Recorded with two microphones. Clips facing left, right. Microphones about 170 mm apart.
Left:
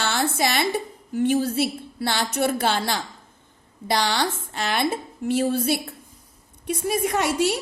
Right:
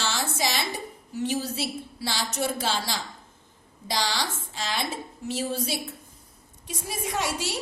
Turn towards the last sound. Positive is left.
turn(degrees=60)  # may be behind; listen again after turning